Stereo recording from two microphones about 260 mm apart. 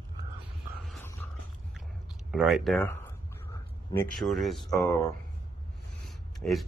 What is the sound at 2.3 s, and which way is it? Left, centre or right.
Speech, centre.